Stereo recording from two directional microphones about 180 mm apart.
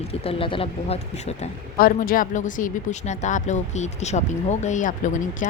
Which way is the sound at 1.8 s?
50° left (ahead or behind).